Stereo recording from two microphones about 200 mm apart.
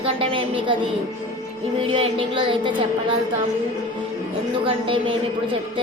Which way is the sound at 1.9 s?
25° right (ahead or behind).